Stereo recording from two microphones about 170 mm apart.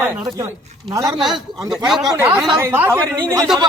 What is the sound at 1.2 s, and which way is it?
A woman's voice, centre (ahead or behind).